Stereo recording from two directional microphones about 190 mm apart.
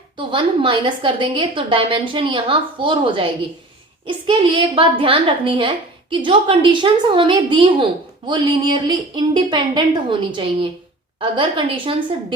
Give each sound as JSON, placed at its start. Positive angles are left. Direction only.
{"t": 0.2, "sound": "a woman's voice", "side_deg": -25}